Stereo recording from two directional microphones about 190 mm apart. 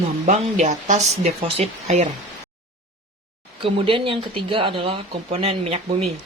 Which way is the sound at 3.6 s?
25° right (ahead or behind).